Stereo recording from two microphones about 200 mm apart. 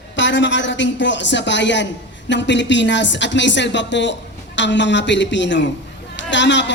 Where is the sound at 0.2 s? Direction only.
65° left (ahead or behind).